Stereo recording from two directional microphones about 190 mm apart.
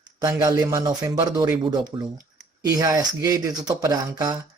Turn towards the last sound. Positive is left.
turn(degrees=-20)  # may be behind; listen again after turning